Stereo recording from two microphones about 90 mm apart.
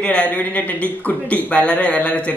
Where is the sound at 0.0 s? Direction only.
15° left (ahead or behind).